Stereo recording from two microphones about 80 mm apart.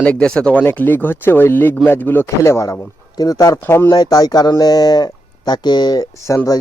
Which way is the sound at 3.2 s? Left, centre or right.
Left.